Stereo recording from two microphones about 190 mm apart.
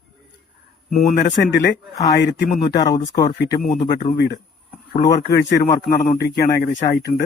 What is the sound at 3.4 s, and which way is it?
Speech, 50° left (ahead or behind).